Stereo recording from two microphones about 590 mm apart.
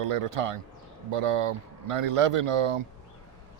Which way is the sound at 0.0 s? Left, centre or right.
Right.